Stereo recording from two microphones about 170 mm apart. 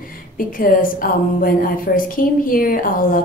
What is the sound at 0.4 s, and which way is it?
A woman's voice, 55° left (ahead or behind).